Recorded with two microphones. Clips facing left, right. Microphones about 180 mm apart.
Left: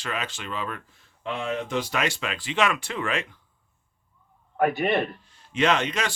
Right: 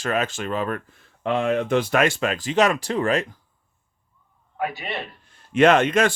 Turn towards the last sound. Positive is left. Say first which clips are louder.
# right 7 dB
turn(degrees=-50)  # may be behind; listen again after turning